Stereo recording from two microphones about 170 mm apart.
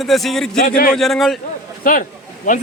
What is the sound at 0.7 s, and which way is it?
Speech, 55° left (ahead or behind).